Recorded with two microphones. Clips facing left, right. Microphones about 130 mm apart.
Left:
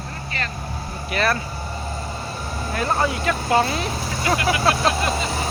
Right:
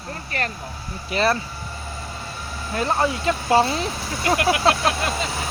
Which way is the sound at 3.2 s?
25° right (ahead or behind).